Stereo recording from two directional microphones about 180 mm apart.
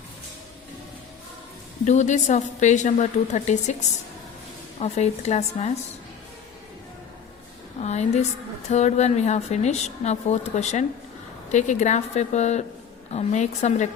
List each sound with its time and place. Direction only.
1.8 s speech: 40° left (ahead or behind)
4.8 s speech: 40° left (ahead or behind)
7.8 s speech: 40° left (ahead or behind)